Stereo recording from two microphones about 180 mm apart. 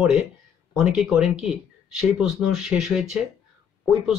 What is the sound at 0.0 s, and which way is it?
Speech, centre (ahead or behind).